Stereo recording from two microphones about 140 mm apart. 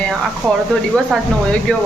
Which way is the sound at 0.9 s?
5° left (ahead or behind).